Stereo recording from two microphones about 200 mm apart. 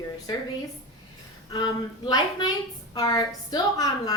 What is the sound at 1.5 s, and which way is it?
A woman's voice, 20° left (ahead or behind).